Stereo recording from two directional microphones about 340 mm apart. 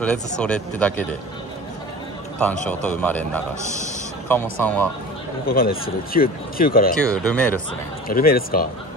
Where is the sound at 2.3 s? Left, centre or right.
Centre.